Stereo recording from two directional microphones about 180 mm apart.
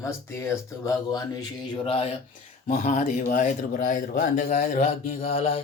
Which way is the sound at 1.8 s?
35° left (ahead or behind).